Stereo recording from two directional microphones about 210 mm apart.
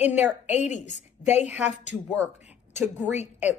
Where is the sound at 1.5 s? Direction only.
5° right (ahead or behind).